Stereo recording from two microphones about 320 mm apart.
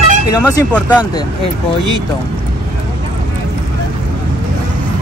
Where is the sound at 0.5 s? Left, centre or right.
Centre.